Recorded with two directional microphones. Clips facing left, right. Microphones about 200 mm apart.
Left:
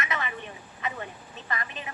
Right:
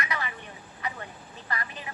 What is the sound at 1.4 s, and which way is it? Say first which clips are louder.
Speech: left 1 dB; 20° left (ahead or behind).